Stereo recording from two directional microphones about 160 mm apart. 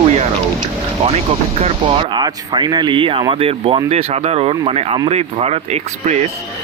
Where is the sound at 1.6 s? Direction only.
35° right (ahead or behind).